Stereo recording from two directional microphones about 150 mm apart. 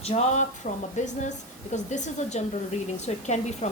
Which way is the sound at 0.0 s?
45° left (ahead or behind).